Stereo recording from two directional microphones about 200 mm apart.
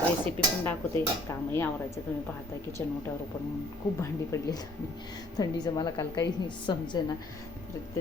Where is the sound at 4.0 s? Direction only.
15° left (ahead or behind).